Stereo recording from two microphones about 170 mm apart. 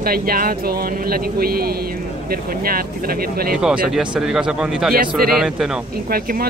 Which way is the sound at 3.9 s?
5° right (ahead or behind).